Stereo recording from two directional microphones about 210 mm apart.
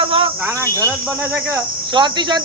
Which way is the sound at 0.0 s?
25° right (ahead or behind).